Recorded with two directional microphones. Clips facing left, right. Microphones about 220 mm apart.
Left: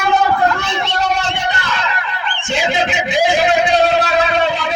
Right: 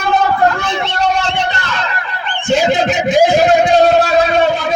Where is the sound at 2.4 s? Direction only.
40° right (ahead or behind).